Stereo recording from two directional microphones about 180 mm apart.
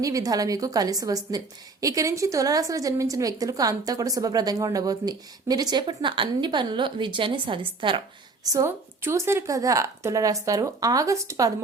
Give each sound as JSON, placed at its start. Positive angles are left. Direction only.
{"t": 0.0, "sound": "a woman's voice", "side_deg": -20}
{"t": 8.4, "sound": "speech", "side_deg": -15}